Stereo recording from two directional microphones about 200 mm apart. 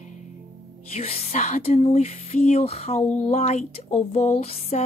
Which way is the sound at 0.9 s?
30° left (ahead or behind).